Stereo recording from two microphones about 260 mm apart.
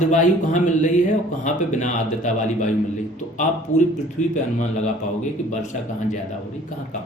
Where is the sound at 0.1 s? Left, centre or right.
Left.